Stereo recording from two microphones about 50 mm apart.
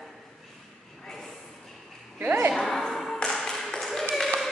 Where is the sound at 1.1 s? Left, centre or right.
Centre.